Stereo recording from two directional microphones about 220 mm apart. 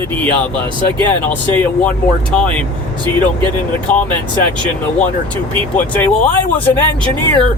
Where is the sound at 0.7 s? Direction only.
20° right (ahead or behind).